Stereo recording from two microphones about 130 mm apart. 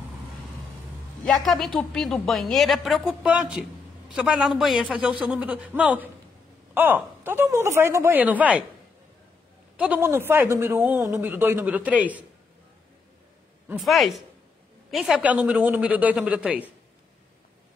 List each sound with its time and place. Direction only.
1.2 s a woman's voice: centre (ahead or behind)
9.8 s speech: 15° right (ahead or behind)
13.7 s a woman's voice: centre (ahead or behind)